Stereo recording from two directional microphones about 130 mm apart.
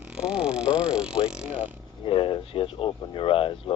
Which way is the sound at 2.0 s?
40° left (ahead or behind).